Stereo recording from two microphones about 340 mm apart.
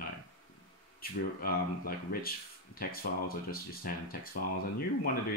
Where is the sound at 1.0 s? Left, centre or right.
Left.